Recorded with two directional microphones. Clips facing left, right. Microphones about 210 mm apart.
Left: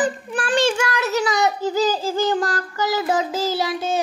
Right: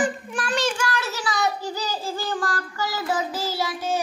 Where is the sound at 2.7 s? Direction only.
20° left (ahead or behind).